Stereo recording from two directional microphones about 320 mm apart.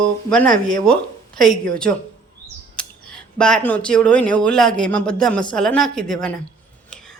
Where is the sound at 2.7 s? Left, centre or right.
Centre.